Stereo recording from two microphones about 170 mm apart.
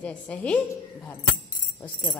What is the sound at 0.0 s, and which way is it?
Speech, 10° left (ahead or behind).